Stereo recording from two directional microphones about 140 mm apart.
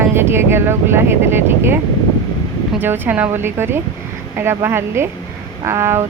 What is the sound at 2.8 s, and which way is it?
Speech, 15° right (ahead or behind).